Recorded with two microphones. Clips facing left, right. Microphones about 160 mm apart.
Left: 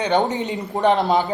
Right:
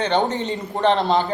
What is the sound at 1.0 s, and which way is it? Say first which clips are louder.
Speech: left 1 dB; 5° left (ahead or behind).